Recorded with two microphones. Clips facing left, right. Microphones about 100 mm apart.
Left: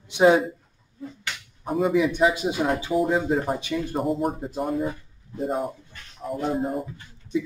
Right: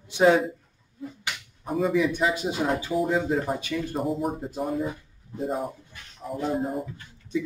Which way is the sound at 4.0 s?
Centre (ahead or behind).